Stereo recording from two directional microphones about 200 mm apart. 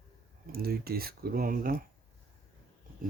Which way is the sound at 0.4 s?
50° right (ahead or behind).